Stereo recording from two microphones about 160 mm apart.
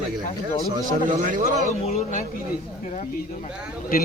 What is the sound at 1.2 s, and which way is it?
Speech, 55° right (ahead or behind).